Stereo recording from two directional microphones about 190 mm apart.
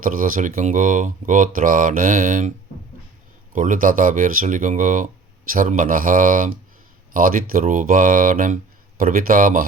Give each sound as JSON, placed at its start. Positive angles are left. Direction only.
{"t": 0.0, "sound": "speech", "side_deg": -45}
{"t": 3.5, "sound": "speech", "side_deg": -45}